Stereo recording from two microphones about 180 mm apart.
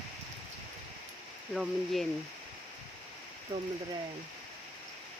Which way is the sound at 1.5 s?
Centre (ahead or behind).